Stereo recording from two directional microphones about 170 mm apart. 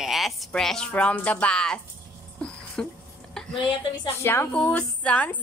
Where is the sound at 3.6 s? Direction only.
25° left (ahead or behind).